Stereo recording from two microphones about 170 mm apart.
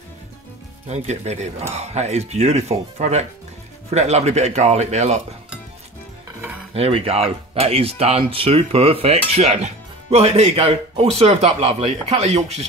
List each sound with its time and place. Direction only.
0.8 s speech: 40° right (ahead or behind)
6.7 s speech: 35° right (ahead or behind)